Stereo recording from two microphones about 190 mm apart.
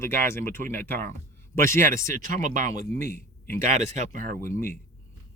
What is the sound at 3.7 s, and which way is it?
Speech, 35° right (ahead or behind).